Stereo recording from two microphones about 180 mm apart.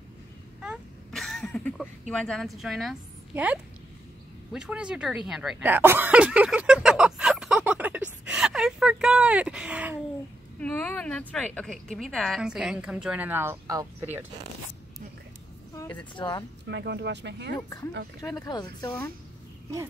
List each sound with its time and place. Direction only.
0.6 s a sound: centre (ahead or behind)
4.5 s throat clearing: 5° right (ahead or behind)
10.6 s a sound: 10° left (ahead or behind)
12.0 s a woman's voice: 5° left (ahead or behind); by 14.2 s 10° right (ahead or behind)
16.2 s speech: 25° left (ahead or behind)
16.6 s speech: 70° right (ahead or behind)
18.2 s speech: 20° left (ahead or behind)